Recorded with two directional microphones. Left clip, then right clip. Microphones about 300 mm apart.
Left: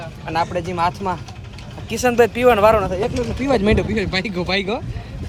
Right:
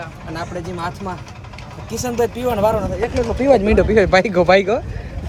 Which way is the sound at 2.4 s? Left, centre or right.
Left.